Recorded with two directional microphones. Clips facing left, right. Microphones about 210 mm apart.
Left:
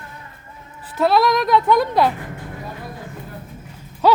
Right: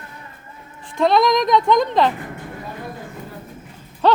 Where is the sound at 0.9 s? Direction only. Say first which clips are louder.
Right 1 dB; 5° left (ahead or behind).